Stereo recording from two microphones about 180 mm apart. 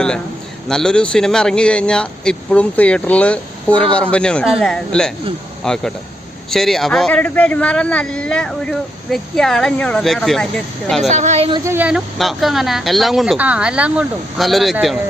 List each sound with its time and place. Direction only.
0.7 s speech: 5° left (ahead or behind)
11.1 s speech: 40° right (ahead or behind)
11.5 s speech: 15° right (ahead or behind)